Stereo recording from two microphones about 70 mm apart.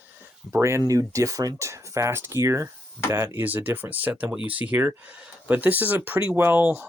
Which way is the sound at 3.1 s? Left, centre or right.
Right.